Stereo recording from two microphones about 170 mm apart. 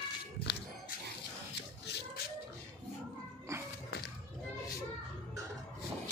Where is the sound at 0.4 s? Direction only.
85° left.